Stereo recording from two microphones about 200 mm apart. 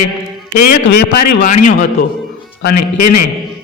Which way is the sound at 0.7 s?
50° left (ahead or behind).